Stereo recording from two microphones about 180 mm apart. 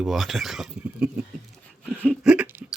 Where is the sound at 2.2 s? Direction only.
10° right (ahead or behind).